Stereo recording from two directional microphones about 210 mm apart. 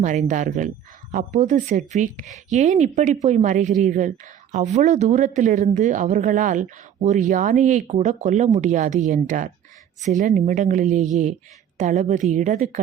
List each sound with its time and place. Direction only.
0.0 s a woman's voice: 35° right (ahead or behind)